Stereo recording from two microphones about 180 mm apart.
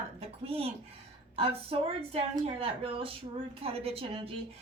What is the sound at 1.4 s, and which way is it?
A woman's voice, 30° right (ahead or behind).